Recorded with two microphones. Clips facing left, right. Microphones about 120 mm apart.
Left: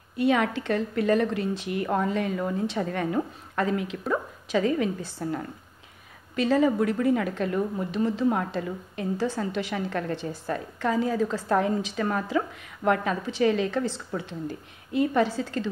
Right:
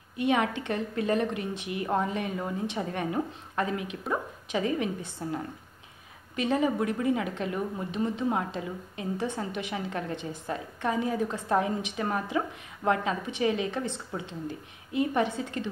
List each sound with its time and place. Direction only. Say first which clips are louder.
0.2 s a woman's voice: left 3 dB; 20° right (ahead or behind)